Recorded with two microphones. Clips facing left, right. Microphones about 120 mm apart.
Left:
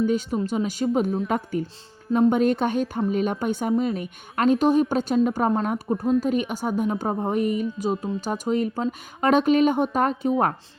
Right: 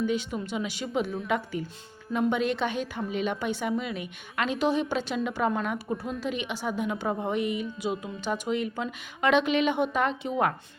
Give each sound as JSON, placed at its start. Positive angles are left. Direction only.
{"t": 0.0, "sound": "a woman's voice", "side_deg": 45}
{"t": 2.0, "sound": "speech", "side_deg": 30}
{"t": 2.3, "sound": "a woman's voice", "side_deg": 45}
{"t": 3.7, "sound": "a woman's voice", "side_deg": 35}